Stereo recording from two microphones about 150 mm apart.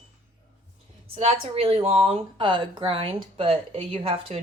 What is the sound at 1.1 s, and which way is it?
Speech, 40° right (ahead or behind).